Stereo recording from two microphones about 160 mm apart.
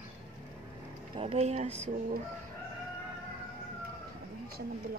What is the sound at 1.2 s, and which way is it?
Speech, 40° right (ahead or behind).